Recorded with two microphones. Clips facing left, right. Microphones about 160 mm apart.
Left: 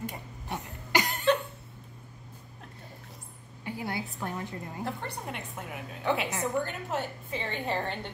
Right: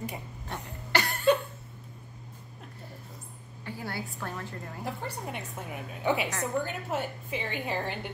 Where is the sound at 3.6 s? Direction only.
15° left (ahead or behind).